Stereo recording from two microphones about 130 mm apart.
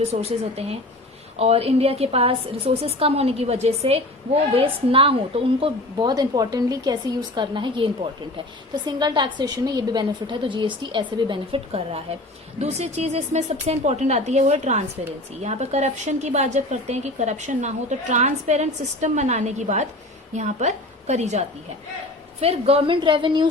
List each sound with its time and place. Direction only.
0.0 s a woman's voice: 50° right (ahead or behind)